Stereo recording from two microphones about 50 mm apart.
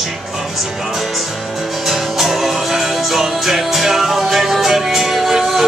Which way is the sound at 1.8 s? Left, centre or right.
Centre.